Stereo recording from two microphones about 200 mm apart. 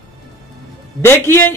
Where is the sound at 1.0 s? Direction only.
10° left (ahead or behind).